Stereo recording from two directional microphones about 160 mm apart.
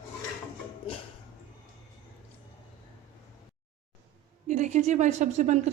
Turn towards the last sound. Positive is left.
turn(degrees=-45)  # may be behind; listen again after turning